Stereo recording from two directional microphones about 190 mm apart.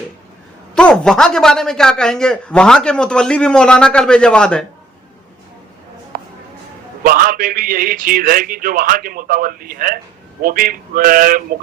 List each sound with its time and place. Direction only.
0.8 s speech: 5° left (ahead or behind)
6.1 s music: 50° right (ahead or behind)
7.0 s a man's voice: 50° right (ahead or behind)